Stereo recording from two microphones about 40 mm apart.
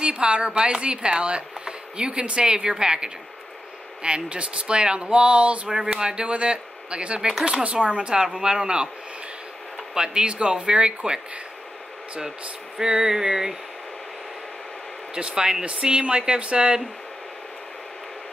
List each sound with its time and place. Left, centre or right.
0.0 s speech: right
5.7 s speech: centre
7.2 s speech: centre
7.4 s speech: right
9.9 s speech: right
12.7 s speech: centre
15.1 s speech: right